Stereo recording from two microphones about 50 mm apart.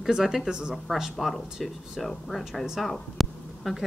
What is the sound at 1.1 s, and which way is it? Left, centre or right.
A woman's voice, centre.